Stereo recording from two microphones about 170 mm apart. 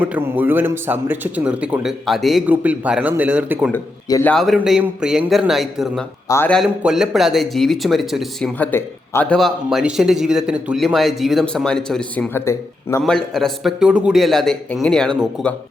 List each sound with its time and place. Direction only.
0.0 s speech: 10° right (ahead or behind)
4.1 s a man's voice: 10° left (ahead or behind)
4.4 s a man's voice: centre (ahead or behind)
6.2 s a man's voice: 15° left (ahead or behind)
6.5 s a man's voice: centre (ahead or behind)
8.5 s a man's voice: 10° left (ahead or behind)
9.4 s a man's voice: centre (ahead or behind); by 13.0 s 15° left (ahead or behind)
13.1 s a man's voice: 5° left (ahead or behind)